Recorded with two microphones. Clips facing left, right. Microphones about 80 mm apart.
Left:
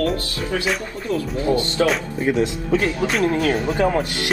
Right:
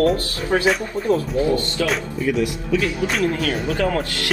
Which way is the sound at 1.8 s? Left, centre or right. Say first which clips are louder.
Left 2 dB; left.